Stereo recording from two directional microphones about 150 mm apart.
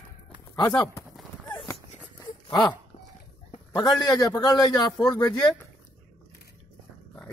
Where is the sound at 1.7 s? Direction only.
25° left (ahead or behind).